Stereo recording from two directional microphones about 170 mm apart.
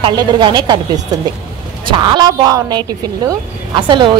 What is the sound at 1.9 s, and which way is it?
Speech, 25° right (ahead or behind).